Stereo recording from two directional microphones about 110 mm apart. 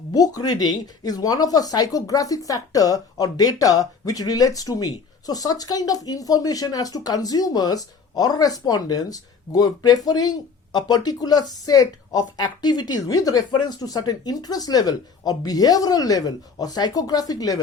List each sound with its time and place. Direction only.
0.1 s speech: 35° left (ahead or behind)